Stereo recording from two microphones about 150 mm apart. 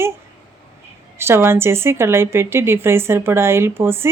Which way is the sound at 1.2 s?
15° right (ahead or behind).